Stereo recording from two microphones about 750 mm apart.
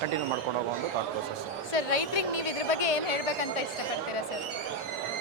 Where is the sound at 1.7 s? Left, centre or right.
Left.